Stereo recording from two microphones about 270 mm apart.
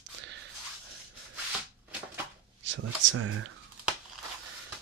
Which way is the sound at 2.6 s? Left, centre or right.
Right.